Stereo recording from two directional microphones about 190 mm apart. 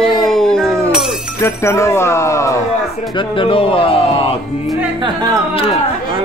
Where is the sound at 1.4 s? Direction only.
15° left (ahead or behind).